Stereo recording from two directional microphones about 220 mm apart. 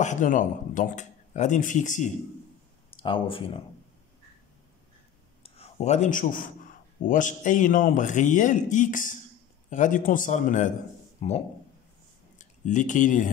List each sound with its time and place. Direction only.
0.0 s speech: 35° left (ahead or behind)
2.9 s speech: 25° left (ahead or behind)
5.4 s speech: 30° left (ahead or behind)